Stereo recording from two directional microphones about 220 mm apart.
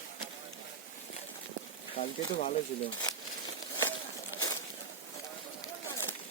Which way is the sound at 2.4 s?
35° left (ahead or behind).